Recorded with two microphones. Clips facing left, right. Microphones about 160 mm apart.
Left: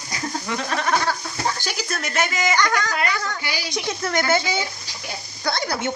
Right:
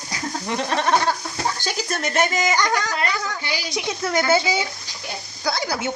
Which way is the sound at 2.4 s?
20° right (ahead or behind).